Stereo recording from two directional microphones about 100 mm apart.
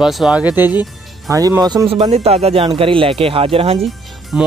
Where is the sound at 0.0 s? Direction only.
5° right (ahead or behind).